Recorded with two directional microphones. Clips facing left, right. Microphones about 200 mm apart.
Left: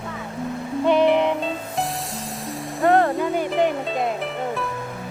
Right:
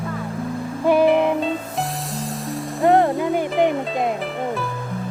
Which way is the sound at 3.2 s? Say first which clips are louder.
Right 2 dB; 20° right (ahead or behind).